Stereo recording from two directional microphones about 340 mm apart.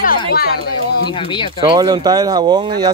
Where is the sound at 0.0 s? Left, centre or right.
Left.